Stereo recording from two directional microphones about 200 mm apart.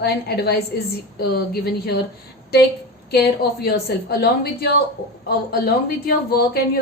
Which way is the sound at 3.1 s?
50° left (ahead or behind).